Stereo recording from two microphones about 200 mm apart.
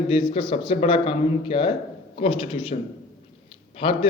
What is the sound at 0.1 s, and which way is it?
A man's voice, 25° left (ahead or behind).